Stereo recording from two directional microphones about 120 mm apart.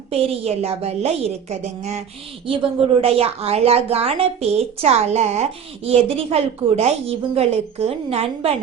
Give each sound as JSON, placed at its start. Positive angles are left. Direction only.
{"t": 0.1, "sound": "a woman's voice", "side_deg": -55}
{"t": 3.0, "sound": "a woman's voice", "side_deg": -55}